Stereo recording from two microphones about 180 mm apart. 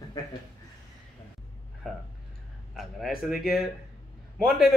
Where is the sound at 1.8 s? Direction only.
Centre (ahead or behind).